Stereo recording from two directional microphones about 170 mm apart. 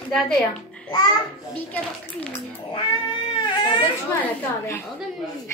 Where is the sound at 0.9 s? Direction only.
25° left (ahead or behind).